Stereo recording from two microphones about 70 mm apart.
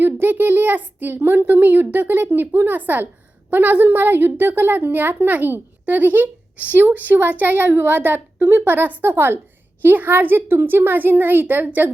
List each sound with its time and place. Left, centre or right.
0.0 s a woman's voice: right